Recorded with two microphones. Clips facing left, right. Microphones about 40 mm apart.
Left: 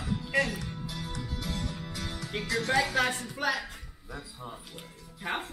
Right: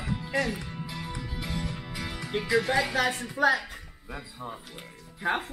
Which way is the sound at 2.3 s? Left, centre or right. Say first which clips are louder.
Right 3 dB; centre.